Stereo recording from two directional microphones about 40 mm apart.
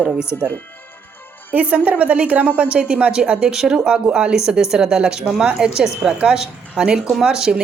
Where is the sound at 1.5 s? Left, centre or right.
Right.